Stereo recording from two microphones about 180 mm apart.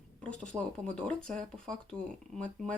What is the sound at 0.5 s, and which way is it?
Speech, 20° right (ahead or behind).